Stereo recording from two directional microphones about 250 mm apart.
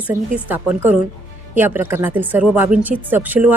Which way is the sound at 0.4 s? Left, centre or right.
Centre.